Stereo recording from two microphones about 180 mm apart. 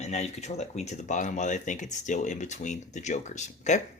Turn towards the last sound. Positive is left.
turn(degrees=40)  # may be behind; listen again after turning